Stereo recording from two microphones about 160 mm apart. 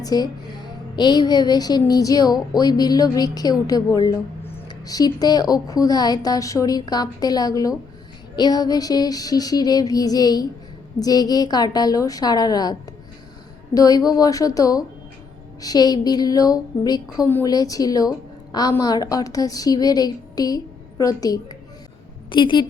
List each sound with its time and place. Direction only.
0.0 s a woman's voice: 25° left (ahead or behind)
13.7 s a woman's voice: 25° left (ahead or behind)